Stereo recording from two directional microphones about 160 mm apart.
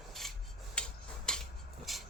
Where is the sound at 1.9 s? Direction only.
Centre (ahead or behind).